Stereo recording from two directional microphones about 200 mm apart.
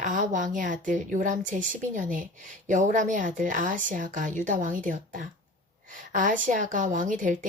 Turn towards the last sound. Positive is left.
turn(degrees=-40)  # may be behind; listen again after turning